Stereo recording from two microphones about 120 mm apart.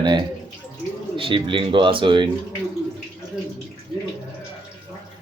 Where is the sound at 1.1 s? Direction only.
45° right (ahead or behind).